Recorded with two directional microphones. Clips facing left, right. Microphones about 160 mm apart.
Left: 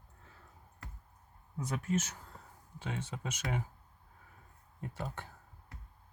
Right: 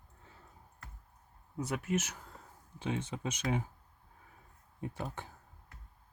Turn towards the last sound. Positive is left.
turn(degrees=-15)  # may be behind; listen again after turning